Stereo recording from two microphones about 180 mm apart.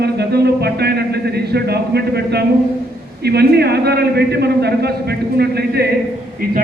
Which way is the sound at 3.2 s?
65° right (ahead or behind).